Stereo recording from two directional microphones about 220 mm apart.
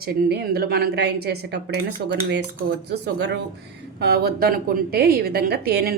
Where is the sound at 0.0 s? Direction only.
45° right (ahead or behind).